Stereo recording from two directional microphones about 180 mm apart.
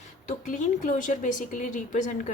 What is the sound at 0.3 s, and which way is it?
A woman's voice, 40° left (ahead or behind).